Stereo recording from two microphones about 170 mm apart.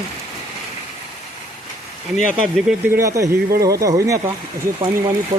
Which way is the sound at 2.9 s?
20° right (ahead or behind).